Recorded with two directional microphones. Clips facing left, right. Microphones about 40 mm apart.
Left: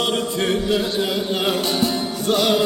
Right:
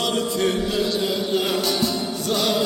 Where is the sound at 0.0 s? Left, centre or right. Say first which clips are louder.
Left 1 dB; left.